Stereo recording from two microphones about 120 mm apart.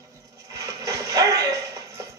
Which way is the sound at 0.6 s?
25° right (ahead or behind).